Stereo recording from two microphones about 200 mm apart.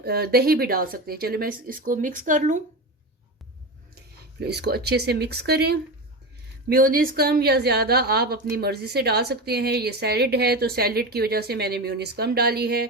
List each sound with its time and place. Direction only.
0.0 s a woman's voice: 50° right (ahead or behind)
4.4 s a woman's voice: 55° right (ahead or behind)